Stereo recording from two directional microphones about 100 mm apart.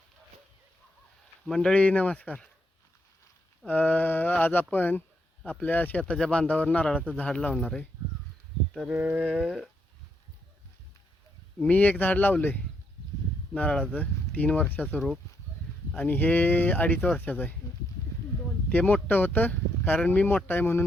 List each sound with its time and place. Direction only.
1.5 s speech: 5° left (ahead or behind)
3.7 s speech: 15° left (ahead or behind)
8.9 s a sound: 15° right (ahead or behind)
11.6 s speech: 15° left (ahead or behind)
18.7 s speech: 15° left (ahead or behind)